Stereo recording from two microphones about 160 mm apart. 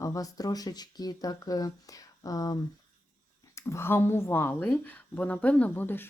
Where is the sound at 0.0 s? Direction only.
20° left (ahead or behind).